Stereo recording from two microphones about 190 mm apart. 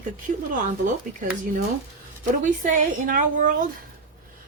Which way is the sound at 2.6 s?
45° right (ahead or behind).